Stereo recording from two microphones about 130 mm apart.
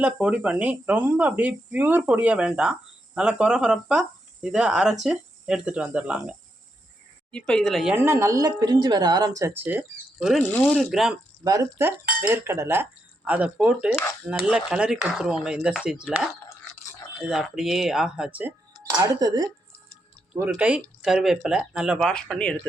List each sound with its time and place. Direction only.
0.0 s speech: 10° right (ahead or behind)
7.3 s speech: 5° left (ahead or behind)
7.9 s speech: 15° right (ahead or behind)
10.2 s speech: 5° right (ahead or behind)
10.5 s speech: 10° left (ahead or behind)
10.8 s speech: 5° right (ahead or behind)
12.2 s speech: 15° right (ahead or behind)
18.9 s speech: 30° right (ahead or behind)
20.5 s speech: 5° right (ahead or behind)